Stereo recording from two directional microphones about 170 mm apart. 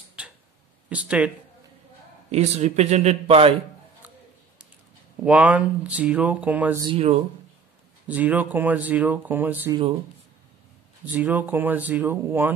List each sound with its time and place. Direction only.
0.8 s speech: 5° right (ahead or behind)
2.3 s speech: 40° right (ahead or behind)
5.2 s speech: 10° right (ahead or behind)
6.8 s speech: 35° right (ahead or behind)
8.1 s speech: 10° right (ahead or behind)
11.1 s speech: 10° right (ahead or behind)